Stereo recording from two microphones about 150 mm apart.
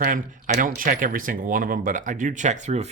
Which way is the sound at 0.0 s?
65° right (ahead or behind).